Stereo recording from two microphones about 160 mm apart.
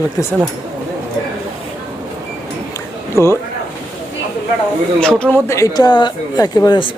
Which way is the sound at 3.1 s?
15° left (ahead or behind).